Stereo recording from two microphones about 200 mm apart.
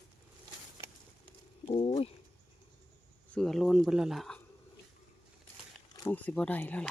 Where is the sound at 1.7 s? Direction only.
30° left (ahead or behind).